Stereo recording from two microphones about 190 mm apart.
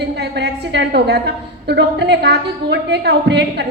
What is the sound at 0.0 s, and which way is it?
A woman's voice, 60° right (ahead or behind).